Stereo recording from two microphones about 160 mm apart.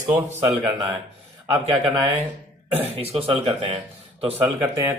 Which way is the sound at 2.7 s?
35° right (ahead or behind).